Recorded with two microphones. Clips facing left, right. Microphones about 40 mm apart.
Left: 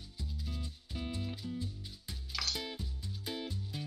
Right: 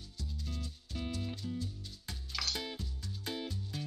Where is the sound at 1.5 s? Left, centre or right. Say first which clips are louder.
Even; left.